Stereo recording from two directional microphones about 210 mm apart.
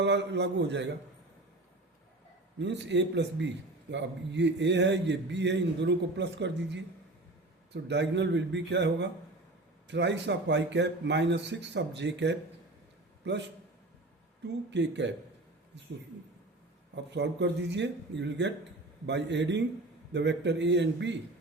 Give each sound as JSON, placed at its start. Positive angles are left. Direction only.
{"t": 0.0, "sound": "a man's voice", "side_deg": -55}
{"t": 2.6, "sound": "a man's voice", "side_deg": -55}
{"t": 14.4, "sound": "a man's voice", "side_deg": -55}
{"t": 16.9, "sound": "a man's voice", "side_deg": -55}